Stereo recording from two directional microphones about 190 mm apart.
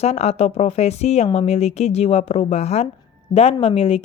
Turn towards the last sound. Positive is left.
turn(degrees=30)  # may be behind; listen again after turning